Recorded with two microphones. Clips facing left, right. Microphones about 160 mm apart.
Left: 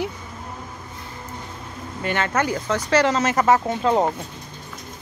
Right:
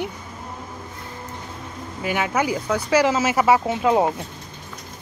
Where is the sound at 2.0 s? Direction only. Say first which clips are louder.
Even; 10° right (ahead or behind).